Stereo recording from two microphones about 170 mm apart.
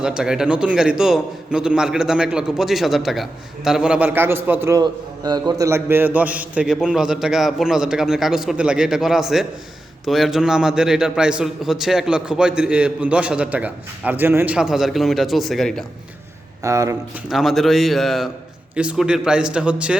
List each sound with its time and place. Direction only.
0.0 s a man's voice: 5° right (ahead or behind)
4.8 s a man's voice: 25° right (ahead or behind); by 15.8 s centre (ahead or behind)
16.6 s speech: 20° right (ahead or behind)
17.2 s a man's voice: centre (ahead or behind)